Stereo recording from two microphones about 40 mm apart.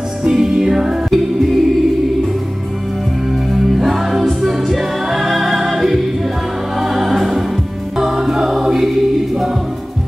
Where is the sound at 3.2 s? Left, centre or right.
Centre.